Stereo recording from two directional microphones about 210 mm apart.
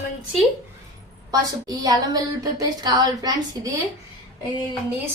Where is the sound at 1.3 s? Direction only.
15° right (ahead or behind).